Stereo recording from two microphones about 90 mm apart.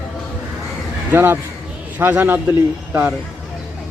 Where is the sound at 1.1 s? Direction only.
25° right (ahead or behind).